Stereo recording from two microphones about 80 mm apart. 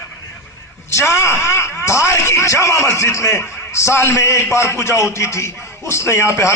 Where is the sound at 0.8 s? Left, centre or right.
Left.